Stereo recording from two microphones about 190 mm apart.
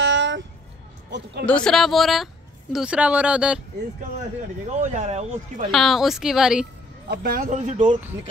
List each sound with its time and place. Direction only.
0.0 s a sound: 70° right (ahead or behind)
1.4 s speech: 5° left (ahead or behind)
4.7 s speech: 40° right (ahead or behind)
5.7 s speech: centre (ahead or behind)
7.1 s speech: 50° right (ahead or behind)